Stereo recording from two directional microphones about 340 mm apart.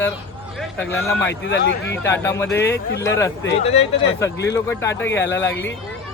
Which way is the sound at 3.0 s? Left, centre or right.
Centre.